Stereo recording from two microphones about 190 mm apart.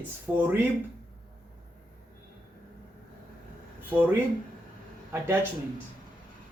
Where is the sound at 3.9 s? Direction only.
10° right (ahead or behind).